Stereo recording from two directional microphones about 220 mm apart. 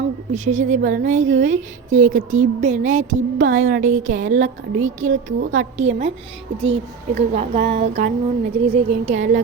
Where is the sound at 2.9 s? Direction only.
65° right (ahead or behind).